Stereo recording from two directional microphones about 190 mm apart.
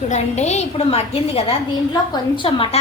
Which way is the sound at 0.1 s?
35° left (ahead or behind).